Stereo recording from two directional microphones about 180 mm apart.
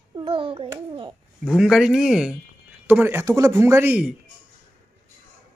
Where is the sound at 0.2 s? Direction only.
30° right (ahead or behind).